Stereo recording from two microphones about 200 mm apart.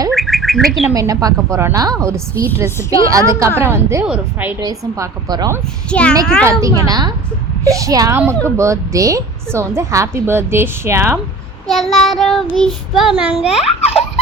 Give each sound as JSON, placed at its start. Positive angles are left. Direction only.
{"t": 0.1, "sound": "bird", "side_deg": 0}
{"t": 0.9, "sound": "speech", "side_deg": -15}
{"t": 4.6, "sound": "speech", "side_deg": -20}
{"t": 5.9, "sound": "child singing", "side_deg": 5}
{"t": 6.4, "sound": "speech", "side_deg": -15}
{"t": 11.7, "sound": "child singing", "side_deg": 0}
{"t": 13.7, "sound": "baby laughter", "side_deg": 30}